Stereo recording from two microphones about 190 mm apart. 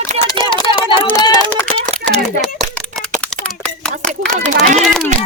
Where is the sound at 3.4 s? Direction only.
5° left (ahead or behind).